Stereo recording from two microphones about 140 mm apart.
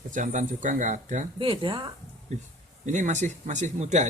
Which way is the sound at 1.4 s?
40° right (ahead or behind).